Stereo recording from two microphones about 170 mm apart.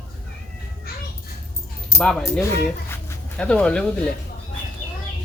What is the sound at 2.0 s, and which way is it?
Speech, 5° left (ahead or behind).